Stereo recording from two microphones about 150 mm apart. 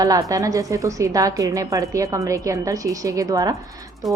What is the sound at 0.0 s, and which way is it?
A woman's voice, 25° right (ahead or behind).